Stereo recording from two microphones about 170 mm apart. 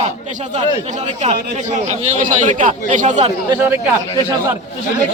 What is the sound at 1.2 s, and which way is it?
A man's voice, 45° right (ahead or behind).